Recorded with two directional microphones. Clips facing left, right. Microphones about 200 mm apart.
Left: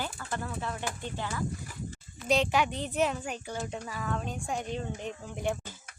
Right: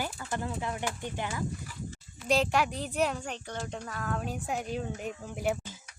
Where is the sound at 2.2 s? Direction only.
Centre (ahead or behind).